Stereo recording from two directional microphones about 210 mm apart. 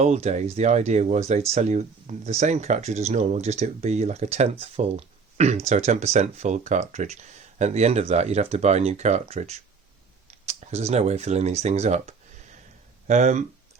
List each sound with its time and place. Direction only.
0.0 s speech: 30° right (ahead or behind)